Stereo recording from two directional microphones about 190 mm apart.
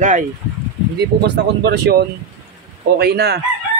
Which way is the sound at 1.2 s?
60° right (ahead or behind).